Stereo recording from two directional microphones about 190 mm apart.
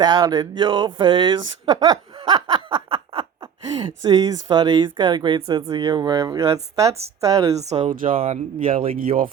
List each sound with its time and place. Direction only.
0.0 s speech: 25° right (ahead or behind)
7.6 s speech: 35° right (ahead or behind)
9.0 s speech: 50° right (ahead or behind)